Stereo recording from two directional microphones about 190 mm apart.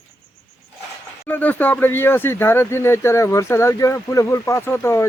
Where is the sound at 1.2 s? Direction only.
10° left (ahead or behind).